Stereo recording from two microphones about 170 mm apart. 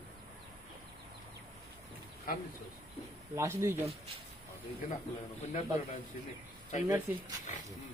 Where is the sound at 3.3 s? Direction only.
15° right (ahead or behind).